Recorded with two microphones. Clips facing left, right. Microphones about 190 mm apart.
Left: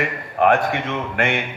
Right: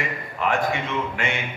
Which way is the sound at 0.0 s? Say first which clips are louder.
Left 8 dB; 60° left (ahead or behind).